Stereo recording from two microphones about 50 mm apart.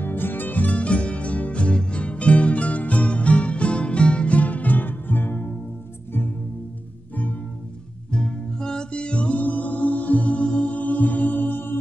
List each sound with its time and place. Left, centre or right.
0.0 s music: left
8.1 s music: centre; by 11.7 s left